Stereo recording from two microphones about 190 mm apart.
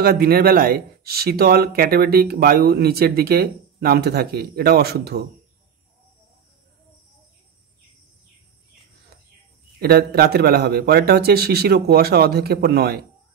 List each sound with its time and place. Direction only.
0.0 s speech: 55° right (ahead or behind)
9.8 s speech: 55° right (ahead or behind)